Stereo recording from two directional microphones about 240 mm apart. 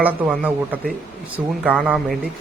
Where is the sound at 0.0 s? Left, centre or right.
Centre.